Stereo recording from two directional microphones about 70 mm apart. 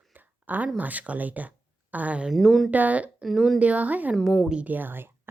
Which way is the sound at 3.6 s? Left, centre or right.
Right.